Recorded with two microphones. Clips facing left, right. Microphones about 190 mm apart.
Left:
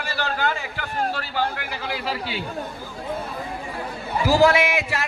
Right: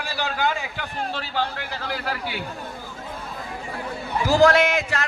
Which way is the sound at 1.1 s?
10° left (ahead or behind).